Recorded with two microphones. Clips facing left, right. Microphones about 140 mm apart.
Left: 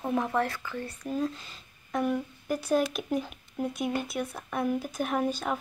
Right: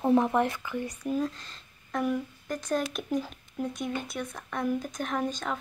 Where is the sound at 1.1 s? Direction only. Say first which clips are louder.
Left 2 dB; 5° left (ahead or behind).